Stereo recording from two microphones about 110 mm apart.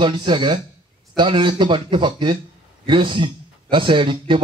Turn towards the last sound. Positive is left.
turn(degrees=-50)  # may be behind; listen again after turning